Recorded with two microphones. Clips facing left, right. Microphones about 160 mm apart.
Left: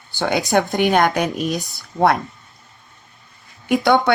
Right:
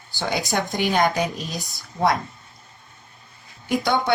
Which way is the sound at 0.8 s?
60° left (ahead or behind).